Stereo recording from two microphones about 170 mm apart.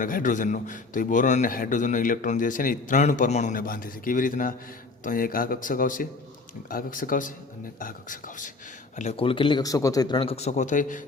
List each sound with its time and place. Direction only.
0.0 s a man's voice: 50° left (ahead or behind)
9.0 s speech: 35° left (ahead or behind)